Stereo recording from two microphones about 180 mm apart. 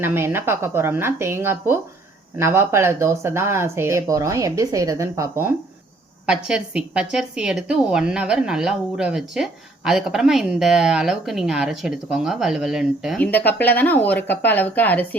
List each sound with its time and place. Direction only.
0.0 s a woman's voice: 10° right (ahead or behind); by 15.0 s 10° left (ahead or behind)